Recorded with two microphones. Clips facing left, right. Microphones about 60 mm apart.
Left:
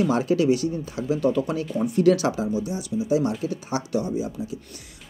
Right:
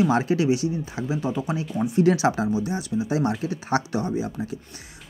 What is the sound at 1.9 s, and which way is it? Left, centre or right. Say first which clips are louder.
Speech: even; right.